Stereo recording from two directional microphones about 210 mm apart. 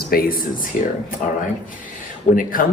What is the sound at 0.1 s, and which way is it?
Speech, 45° left (ahead or behind).